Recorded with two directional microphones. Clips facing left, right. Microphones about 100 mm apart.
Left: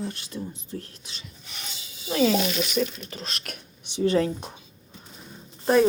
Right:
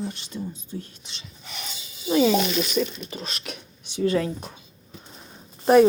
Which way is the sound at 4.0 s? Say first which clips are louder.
Left 1 dB; 30° left (ahead or behind).